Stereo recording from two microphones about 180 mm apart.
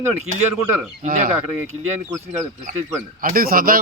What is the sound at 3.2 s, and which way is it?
Speech, 55° right (ahead or behind).